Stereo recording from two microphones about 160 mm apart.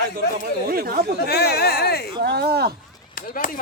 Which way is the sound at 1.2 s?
80° left.